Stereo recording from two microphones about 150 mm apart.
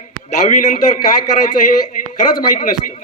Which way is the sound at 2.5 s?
60° left (ahead or behind).